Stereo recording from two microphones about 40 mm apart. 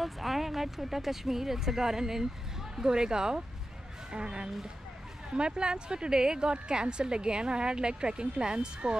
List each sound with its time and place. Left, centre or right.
0.0 s speech: centre; by 8.9 s right